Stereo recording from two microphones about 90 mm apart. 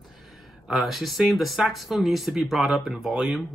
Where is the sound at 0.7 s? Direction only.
Centre (ahead or behind).